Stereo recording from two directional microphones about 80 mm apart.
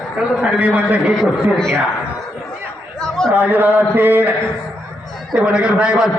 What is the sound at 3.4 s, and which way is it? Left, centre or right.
Speech, centre.